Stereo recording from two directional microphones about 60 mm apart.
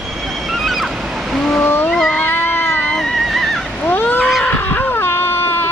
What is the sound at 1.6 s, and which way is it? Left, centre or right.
Cat, left.